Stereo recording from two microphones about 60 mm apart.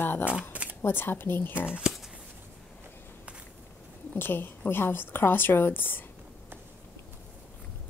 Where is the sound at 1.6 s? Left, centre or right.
Centre.